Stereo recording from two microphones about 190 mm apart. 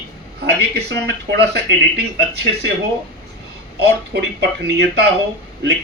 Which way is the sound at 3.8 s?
60° right (ahead or behind).